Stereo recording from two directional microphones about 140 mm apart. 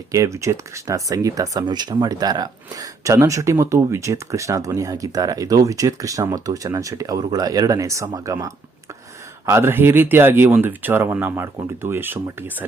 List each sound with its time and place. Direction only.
0.1 s speech: 20° right (ahead or behind)